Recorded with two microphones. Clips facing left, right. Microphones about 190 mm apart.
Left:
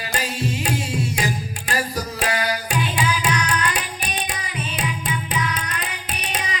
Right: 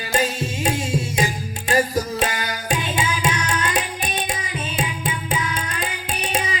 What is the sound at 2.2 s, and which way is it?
Music, 25° right (ahead or behind).